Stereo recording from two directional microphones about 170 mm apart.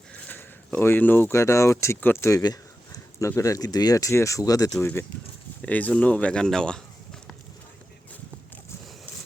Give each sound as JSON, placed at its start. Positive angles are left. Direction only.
{"t": 0.1, "sound": "speech", "side_deg": 10}
{"t": 5.6, "sound": "speech", "side_deg": 10}